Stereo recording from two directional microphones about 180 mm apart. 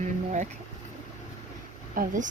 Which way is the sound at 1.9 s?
45° right (ahead or behind).